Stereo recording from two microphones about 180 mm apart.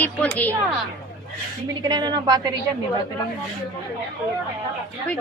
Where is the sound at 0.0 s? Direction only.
10° left (ahead or behind).